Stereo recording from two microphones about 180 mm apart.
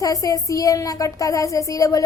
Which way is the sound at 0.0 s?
20° left (ahead or behind).